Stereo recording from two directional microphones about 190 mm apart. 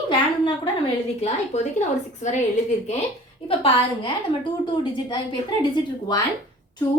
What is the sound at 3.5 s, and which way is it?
Speech, 25° left (ahead or behind).